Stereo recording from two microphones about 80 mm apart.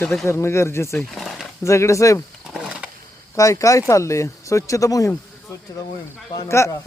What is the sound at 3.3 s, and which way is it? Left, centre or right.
Speech, left.